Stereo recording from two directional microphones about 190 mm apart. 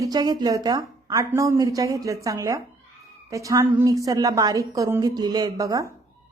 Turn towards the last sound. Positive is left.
turn(degrees=-20)  # may be behind; listen again after turning